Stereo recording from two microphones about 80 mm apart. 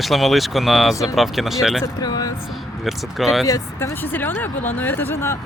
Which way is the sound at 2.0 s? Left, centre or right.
Left.